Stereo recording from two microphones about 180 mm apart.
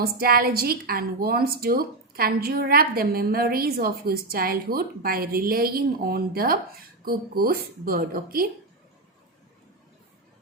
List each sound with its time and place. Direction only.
0.0 s a woman's voice: 55° right (ahead or behind)